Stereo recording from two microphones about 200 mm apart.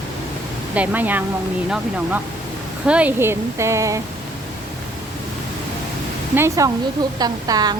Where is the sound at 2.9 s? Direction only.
5° right (ahead or behind).